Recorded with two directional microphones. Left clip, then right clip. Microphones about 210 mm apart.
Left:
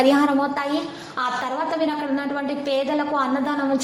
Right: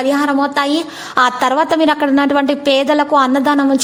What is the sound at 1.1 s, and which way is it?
A woman's voice, 45° right (ahead or behind).